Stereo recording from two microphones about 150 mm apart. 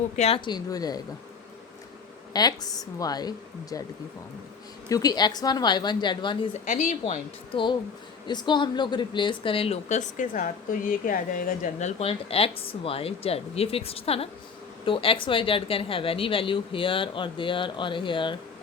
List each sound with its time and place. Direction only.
0.2 s a woman's voice: 40° left (ahead or behind)
2.3 s a woman's voice: 25° left (ahead or behind)
4.9 s a woman's voice: 25° left (ahead or behind)
6.7 s speech: 55° left (ahead or behind)
7.0 s speech: 35° left (ahead or behind)